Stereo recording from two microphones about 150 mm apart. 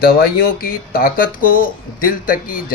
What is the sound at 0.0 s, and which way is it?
Speech, 85° left.